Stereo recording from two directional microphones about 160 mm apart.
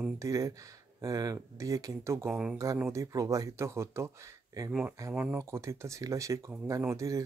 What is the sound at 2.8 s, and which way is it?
Speech, 20° right (ahead or behind).